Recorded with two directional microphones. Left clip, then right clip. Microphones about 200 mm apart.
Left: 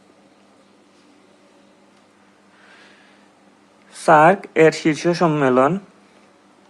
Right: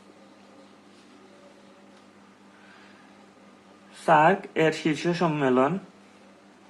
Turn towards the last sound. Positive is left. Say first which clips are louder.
# left 7 dB
turn(degrees=30)  # may be behind; listen again after turning